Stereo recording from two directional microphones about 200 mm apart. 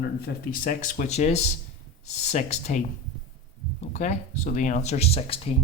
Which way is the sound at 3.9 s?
35° left (ahead or behind).